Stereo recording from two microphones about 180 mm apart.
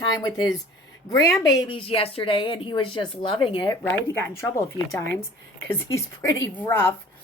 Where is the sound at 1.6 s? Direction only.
30° left (ahead or behind).